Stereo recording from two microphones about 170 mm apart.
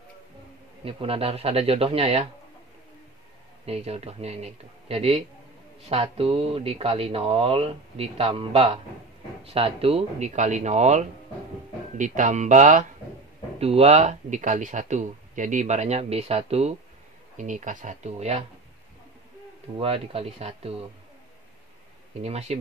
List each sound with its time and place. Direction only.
0.8 s speech: 35° right (ahead or behind)
3.6 s speech: 35° right (ahead or behind)
19.8 s speech: 35° right (ahead or behind)
22.2 s speech: 40° right (ahead or behind)